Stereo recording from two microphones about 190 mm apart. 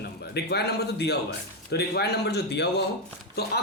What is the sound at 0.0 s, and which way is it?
A man's voice, 55° left (ahead or behind).